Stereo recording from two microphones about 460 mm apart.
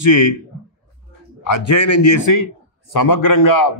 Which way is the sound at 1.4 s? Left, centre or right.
Left.